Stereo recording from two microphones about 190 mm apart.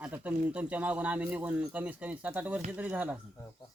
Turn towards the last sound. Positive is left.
turn(degrees=-10)  # may be behind; listen again after turning